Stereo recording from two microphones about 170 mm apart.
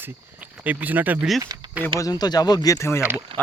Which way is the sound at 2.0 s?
25° left (ahead or behind).